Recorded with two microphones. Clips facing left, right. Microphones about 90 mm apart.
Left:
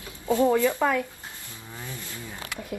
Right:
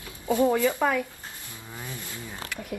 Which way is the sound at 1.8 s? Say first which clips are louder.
Even; 20° right (ahead or behind).